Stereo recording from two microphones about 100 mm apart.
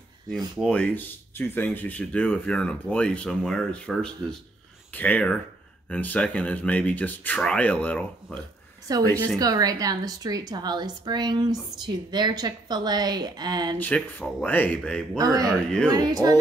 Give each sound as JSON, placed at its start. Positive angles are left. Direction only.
{"t": 0.7, "sound": "speech", "side_deg": 15}
{"t": 8.8, "sound": "a woman's voice", "side_deg": -35}
{"t": 13.7, "sound": "speech", "side_deg": 15}
{"t": 15.1, "sound": "speech", "side_deg": -40}
{"t": 15.5, "sound": "speech", "side_deg": 10}
{"t": 15.9, "sound": "speech", "side_deg": -40}